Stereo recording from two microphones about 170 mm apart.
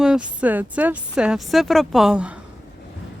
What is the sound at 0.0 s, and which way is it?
Speech, 5° right (ahead or behind).